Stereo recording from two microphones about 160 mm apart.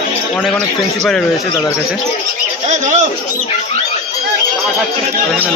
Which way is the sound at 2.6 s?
50° right (ahead or behind).